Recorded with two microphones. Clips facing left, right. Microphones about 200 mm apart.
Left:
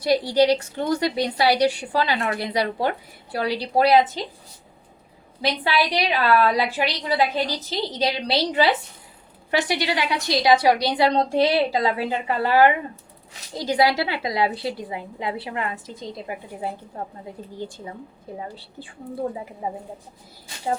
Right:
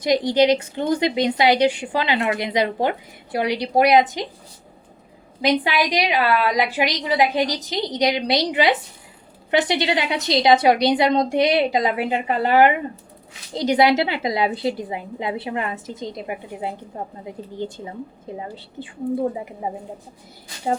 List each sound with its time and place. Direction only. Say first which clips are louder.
0.0 s a woman's voice: right 1 dB; 20° right (ahead or behind)
5.4 s a woman's voice: right 3 dB; 15° right (ahead or behind)